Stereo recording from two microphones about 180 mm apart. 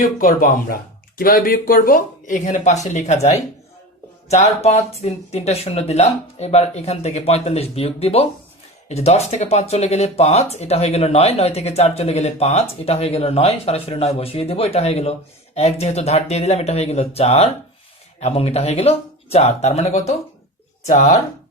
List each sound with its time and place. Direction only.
0.0 s speech: 50° left (ahead or behind)
4.6 s speech: 35° left (ahead or behind)